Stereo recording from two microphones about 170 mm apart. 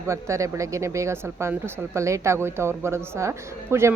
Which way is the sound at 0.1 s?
20° right (ahead or behind).